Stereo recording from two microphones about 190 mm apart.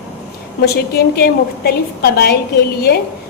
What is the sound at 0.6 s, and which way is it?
A woman's voice, 55° left (ahead or behind).